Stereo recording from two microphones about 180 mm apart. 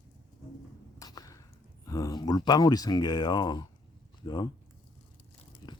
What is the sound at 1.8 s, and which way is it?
Speech, 20° left (ahead or behind).